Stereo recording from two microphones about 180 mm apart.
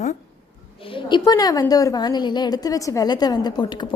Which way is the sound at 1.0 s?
25° left (ahead or behind).